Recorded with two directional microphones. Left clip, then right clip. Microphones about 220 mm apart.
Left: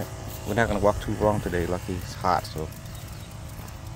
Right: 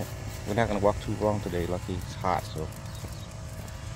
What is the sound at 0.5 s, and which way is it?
Speech, 15° left (ahead or behind).